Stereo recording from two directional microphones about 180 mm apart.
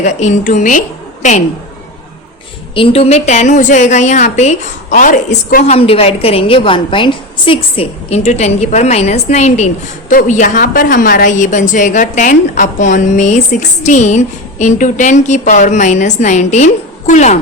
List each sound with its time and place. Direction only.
0.0 s a woman's voice: 45° left (ahead or behind)
2.7 s a woman's voice: 30° left (ahead or behind); by 5.6 s 50° left (ahead or behind)
5.6 s a woman's voice: 35° left (ahead or behind)